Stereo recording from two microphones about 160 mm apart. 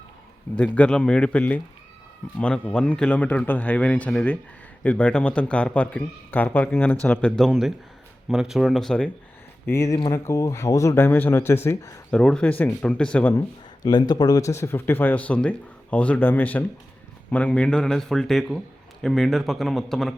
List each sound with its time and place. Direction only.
0.5 s a man's voice: 10° left (ahead or behind)
9.7 s a man's voice: 20° left (ahead or behind)
12.1 s a man's voice: 5° left (ahead or behind)
13.8 s a man's voice: 25° left (ahead or behind); by 20.1 s centre (ahead or behind)